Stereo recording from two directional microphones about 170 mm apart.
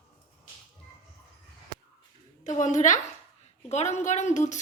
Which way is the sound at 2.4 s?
45° left (ahead or behind).